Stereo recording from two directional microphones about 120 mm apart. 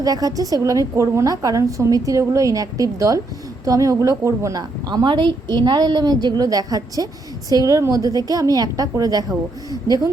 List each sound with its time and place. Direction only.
0.0 s a woman's voice: 30° right (ahead or behind)